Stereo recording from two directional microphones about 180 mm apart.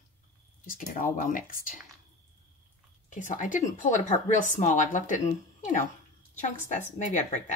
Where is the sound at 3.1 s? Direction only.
45° left (ahead or behind).